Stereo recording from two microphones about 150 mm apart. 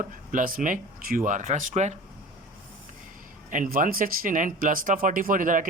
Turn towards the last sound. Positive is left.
turn(degrees=-65)  # may be behind; listen again after turning